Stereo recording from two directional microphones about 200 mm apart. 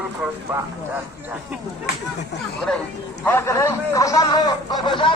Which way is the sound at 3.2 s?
10° left (ahead or behind).